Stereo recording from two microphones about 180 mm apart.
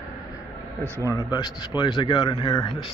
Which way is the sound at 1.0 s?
20° left (ahead or behind).